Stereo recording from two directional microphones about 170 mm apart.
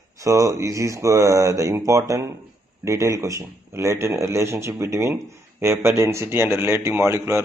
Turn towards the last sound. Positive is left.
turn(degrees=-15)  # may be behind; listen again after turning